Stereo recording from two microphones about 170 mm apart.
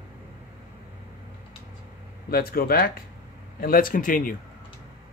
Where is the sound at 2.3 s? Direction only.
60° left (ahead or behind).